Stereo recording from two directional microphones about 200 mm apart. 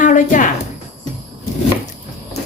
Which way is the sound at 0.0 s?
40° left (ahead or behind).